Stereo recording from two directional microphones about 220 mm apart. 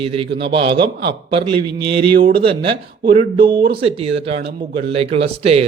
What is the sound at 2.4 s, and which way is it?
Speech, 25° right (ahead or behind).